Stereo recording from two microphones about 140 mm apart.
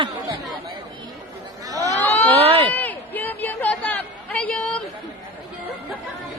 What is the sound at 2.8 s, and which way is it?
Chatter, 15° left (ahead or behind).